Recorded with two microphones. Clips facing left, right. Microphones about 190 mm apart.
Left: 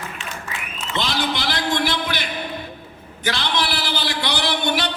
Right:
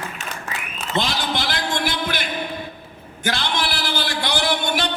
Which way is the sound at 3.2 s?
50° right (ahead or behind).